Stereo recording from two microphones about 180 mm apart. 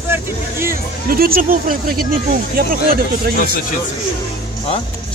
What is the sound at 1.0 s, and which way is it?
Speech, 55° right (ahead or behind).